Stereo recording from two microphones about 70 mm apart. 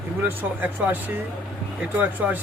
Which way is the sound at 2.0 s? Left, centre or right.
Right.